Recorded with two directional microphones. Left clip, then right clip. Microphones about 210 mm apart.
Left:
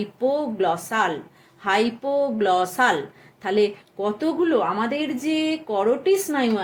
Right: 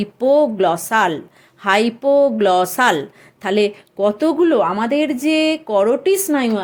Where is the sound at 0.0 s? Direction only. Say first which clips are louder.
Right 9 dB; 50° right (ahead or behind).